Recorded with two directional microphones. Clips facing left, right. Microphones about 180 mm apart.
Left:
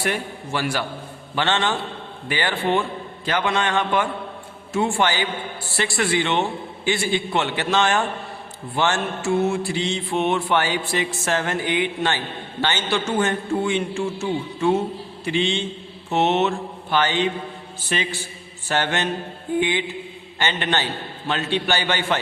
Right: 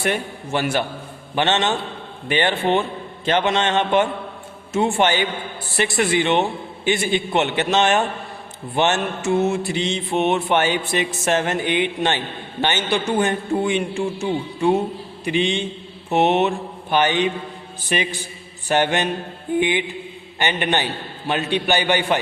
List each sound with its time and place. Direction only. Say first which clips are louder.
0.0 s mantra: right 2 dB; 20° right (ahead or behind)
12.6 s a man's voice: right 2 dB; 15° right (ahead or behind)
16.0 s mantra: right 2 dB; 15° right (ahead or behind)
17.8 s a man's voice: right 3 dB; 15° right (ahead or behind)